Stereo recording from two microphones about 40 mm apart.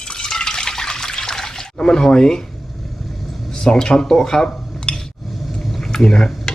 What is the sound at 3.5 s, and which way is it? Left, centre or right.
Speech, centre.